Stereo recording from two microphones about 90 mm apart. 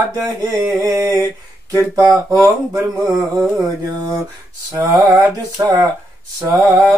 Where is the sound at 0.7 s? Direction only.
40° right (ahead or behind).